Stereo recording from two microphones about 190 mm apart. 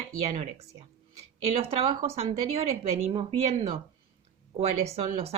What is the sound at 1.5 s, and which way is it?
Speech, 30° right (ahead or behind).